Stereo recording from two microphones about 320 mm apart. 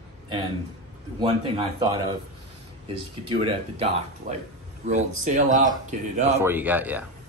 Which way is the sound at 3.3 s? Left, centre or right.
Centre.